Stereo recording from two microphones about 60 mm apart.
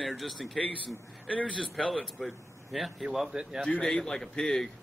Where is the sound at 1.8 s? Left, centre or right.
Centre.